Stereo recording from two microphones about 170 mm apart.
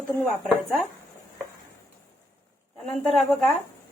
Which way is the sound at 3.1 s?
Centre (ahead or behind).